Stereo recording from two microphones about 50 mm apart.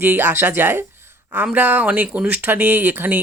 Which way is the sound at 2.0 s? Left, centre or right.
Right.